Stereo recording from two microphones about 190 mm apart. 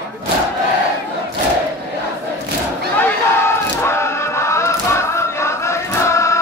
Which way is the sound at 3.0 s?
15° left (ahead or behind).